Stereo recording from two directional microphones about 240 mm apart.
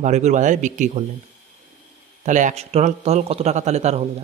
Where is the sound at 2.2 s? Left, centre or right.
Right.